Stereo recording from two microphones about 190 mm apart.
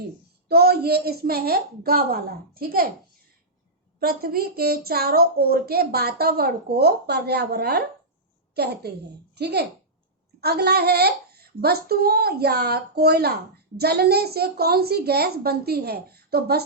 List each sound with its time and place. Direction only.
0.4 s speech: 55° right (ahead or behind)
4.0 s a child's voice: 50° right (ahead or behind)